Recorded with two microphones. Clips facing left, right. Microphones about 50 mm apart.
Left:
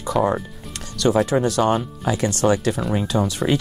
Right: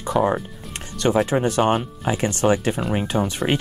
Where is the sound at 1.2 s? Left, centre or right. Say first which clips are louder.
Even; right.